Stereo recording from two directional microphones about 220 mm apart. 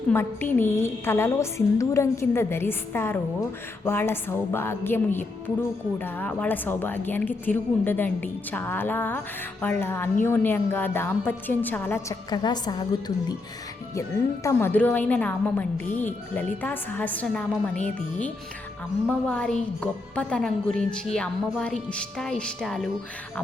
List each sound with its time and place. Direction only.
0.1 s a woman's voice: 10° left (ahead or behind)
14.4 s a woman's voice: 10° left (ahead or behind)
19.0 s speech: 5° left (ahead or behind)